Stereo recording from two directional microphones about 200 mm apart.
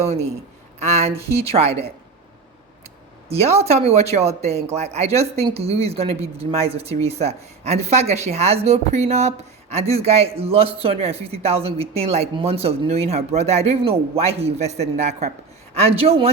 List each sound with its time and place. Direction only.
0.0 s speech: 35° right (ahead or behind)
3.2 s speech: 30° right (ahead or behind)